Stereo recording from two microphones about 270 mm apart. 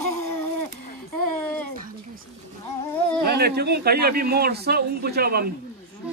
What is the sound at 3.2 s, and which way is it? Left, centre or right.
Speech, right.